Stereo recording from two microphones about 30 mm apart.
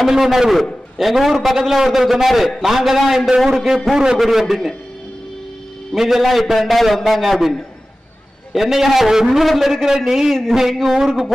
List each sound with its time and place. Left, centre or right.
0.0 s a man's voice: centre
4.2 s a man's voice: centre
5.9 s a man's voice: centre
7.2 s a man's voice: centre
8.5 s a man's voice: centre
9.8 s a man's voice: centre